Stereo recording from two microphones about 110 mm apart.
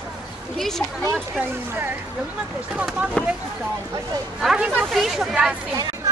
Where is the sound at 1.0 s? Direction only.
20° right (ahead or behind).